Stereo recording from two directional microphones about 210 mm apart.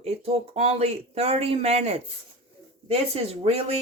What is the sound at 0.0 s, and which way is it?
Speech, 30° right (ahead or behind).